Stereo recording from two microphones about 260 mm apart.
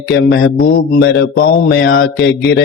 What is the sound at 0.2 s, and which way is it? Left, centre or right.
Mantra, left.